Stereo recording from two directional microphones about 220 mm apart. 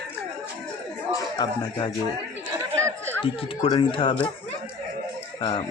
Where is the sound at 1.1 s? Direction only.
20° left (ahead or behind).